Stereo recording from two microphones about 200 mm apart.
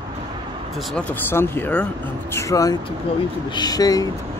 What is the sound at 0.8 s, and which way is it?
Speech, 5° left (ahead or behind).